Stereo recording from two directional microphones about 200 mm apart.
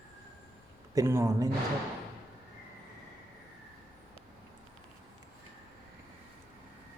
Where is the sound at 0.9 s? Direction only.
15° right (ahead or behind).